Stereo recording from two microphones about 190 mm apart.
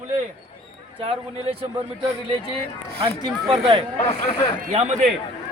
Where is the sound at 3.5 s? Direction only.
30° right (ahead or behind).